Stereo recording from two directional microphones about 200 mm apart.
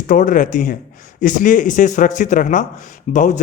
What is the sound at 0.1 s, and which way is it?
A man's voice, 40° left (ahead or behind).